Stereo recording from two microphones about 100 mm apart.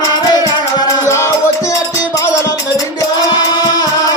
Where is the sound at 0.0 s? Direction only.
40° left (ahead or behind).